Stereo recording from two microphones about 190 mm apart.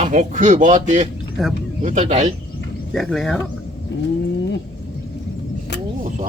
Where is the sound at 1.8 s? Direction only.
40° right (ahead or behind).